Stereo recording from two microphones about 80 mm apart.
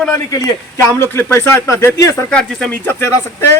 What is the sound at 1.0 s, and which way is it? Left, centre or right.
A man's voice, left.